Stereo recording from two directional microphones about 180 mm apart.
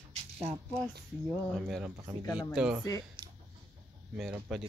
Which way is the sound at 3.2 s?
25° right (ahead or behind).